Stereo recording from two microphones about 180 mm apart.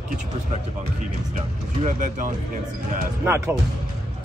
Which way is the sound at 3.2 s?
15° right (ahead or behind).